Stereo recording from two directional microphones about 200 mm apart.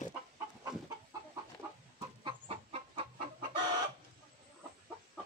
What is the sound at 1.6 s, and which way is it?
Chicken, 10° right (ahead or behind).